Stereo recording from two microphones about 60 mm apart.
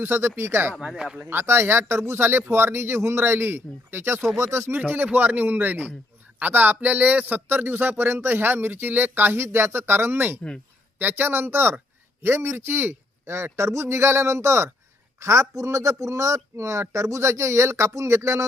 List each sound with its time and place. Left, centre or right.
0.0 s a man's voice: right
0.9 s speech: centre
1.2 s a man's voice: right
5.0 s a man's voice: right